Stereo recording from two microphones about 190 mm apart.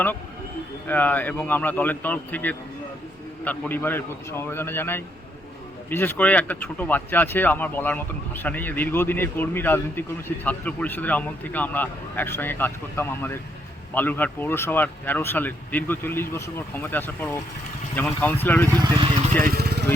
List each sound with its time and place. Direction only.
0.9 s speech: 10° left (ahead or behind)
18.8 s speech: 25° right (ahead or behind)
19.5 s speech: 55° right (ahead or behind)